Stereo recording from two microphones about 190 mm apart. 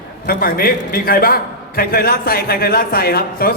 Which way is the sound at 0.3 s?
50° left (ahead or behind).